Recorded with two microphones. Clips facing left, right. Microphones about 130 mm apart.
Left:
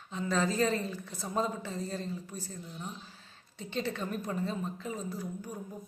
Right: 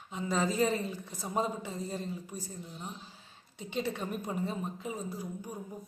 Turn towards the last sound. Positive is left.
turn(degrees=-15)  # may be behind; listen again after turning